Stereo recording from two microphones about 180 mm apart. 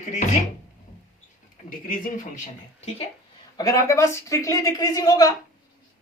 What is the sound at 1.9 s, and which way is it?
Speech, 45° left (ahead or behind).